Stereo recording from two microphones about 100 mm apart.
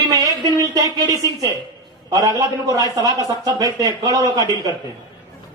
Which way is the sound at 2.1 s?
35° right (ahead or behind).